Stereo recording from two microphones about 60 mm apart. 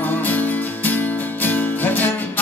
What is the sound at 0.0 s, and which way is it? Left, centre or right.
Music, left.